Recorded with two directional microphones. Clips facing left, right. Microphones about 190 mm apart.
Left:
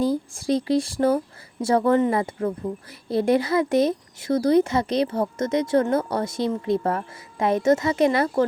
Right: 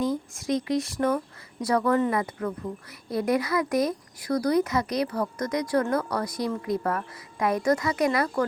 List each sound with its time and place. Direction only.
0.0 s a woman's voice: 30° left (ahead or behind)